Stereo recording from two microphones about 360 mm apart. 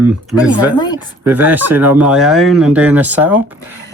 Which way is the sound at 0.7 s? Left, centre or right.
Centre.